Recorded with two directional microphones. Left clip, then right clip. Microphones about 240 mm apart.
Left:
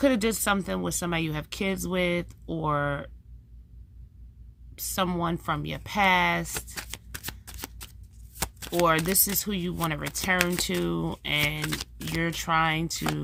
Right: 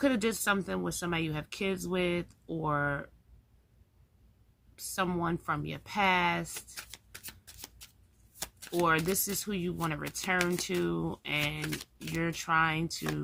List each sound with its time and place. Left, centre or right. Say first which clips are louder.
0.0 s speech: left 5 dB; left
4.7 s speech: left 4 dB; left